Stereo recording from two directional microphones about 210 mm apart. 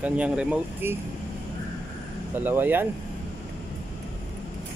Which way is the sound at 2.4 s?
10° right (ahead or behind).